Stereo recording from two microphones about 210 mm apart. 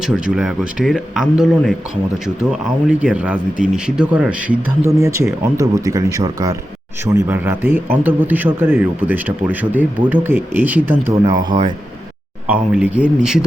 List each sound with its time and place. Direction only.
0.0 s speech: 5° right (ahead or behind)
11.4 s speech: 20° right (ahead or behind)
12.5 s speech: 5° right (ahead or behind)